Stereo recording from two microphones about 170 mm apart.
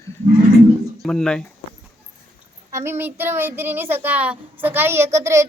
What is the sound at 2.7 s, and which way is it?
Child singing, 15° right (ahead or behind).